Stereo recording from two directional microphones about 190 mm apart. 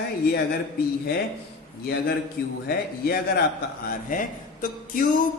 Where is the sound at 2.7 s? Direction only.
55° left (ahead or behind).